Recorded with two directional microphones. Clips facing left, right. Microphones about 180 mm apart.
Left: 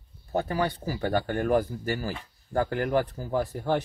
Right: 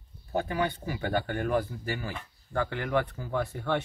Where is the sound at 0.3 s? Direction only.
40° left (ahead or behind).